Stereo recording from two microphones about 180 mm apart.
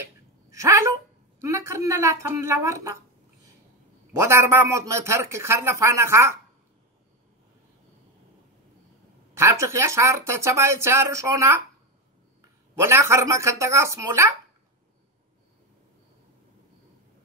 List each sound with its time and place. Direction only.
0.5 s a sound: 15° right (ahead or behind)
1.4 s speech: 15° right (ahead or behind)
4.2 s speech: 15° right (ahead or behind)
9.3 s a man's voice: 15° right (ahead or behind)